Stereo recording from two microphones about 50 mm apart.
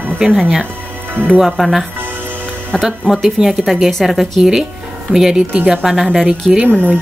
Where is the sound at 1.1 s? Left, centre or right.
Right.